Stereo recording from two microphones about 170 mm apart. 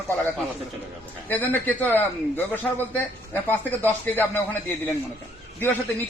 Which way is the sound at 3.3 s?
10° left (ahead or behind).